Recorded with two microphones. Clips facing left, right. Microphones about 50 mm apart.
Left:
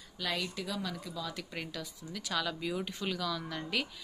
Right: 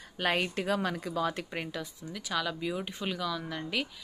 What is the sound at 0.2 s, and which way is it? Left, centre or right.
Speech, right.